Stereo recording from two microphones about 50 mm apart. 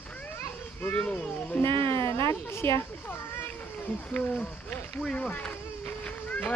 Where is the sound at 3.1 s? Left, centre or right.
Left.